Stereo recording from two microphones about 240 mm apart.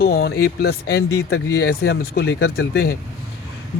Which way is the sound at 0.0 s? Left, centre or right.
Left.